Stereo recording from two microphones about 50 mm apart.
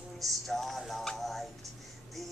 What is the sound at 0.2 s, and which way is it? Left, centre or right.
Music, centre.